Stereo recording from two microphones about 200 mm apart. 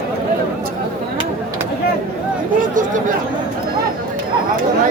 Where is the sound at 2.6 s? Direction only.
40° right (ahead or behind).